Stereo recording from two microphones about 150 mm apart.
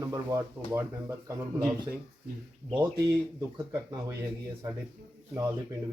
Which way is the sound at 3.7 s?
20° right (ahead or behind).